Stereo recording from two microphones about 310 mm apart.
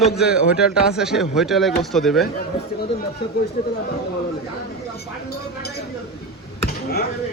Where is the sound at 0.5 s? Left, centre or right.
Centre.